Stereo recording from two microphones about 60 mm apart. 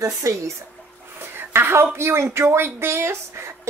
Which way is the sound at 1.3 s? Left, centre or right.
Right.